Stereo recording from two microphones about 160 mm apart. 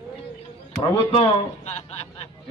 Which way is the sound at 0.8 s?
35° left (ahead or behind).